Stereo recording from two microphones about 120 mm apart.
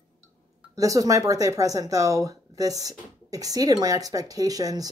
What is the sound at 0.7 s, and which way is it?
Speech, 30° right (ahead or behind).